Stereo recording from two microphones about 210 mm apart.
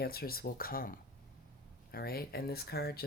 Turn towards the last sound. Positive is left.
turn(degrees=50)  # may be behind; listen again after turning